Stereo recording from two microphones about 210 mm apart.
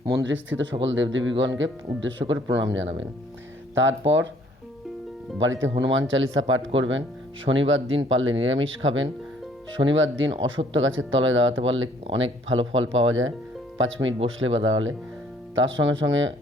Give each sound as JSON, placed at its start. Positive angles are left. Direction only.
{"t": 0.3, "sound": "speech", "side_deg": -60}
{"t": 5.4, "sound": "speech", "side_deg": -65}